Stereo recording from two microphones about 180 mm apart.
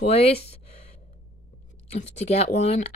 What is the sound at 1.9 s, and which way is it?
Speech, 35° left (ahead or behind).